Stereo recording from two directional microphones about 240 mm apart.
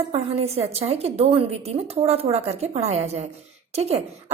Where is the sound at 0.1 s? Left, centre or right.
Right.